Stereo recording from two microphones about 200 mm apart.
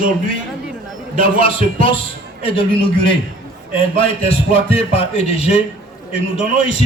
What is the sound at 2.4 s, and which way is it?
Speech, 25° left (ahead or behind).